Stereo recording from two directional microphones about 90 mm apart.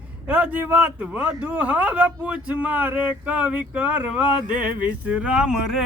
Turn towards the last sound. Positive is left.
turn(degrees=-5)  # may be behind; listen again after turning